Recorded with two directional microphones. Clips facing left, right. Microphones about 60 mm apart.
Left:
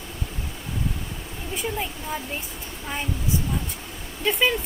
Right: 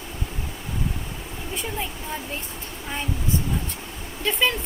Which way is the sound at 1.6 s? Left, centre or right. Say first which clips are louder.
Left 3 dB; centre.